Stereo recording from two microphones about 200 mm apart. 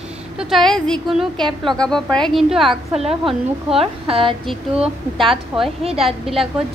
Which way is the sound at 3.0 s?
30° right (ahead or behind).